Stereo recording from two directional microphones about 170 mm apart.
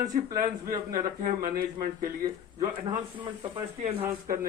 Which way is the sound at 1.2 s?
55° right (ahead or behind).